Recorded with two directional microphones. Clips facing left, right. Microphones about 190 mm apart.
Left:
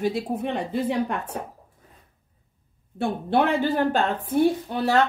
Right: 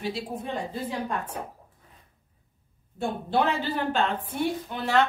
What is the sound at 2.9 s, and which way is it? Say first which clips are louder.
Speech: left 4 dB; 60° left (ahead or behind).